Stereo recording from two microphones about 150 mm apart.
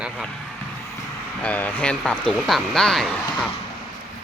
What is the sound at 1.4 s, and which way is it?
Speech, 10° left (ahead or behind).